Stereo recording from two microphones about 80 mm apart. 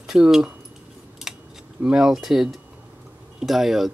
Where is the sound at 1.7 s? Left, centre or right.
Centre.